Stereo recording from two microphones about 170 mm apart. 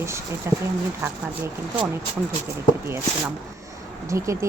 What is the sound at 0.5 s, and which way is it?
Speech, 15° right (ahead or behind).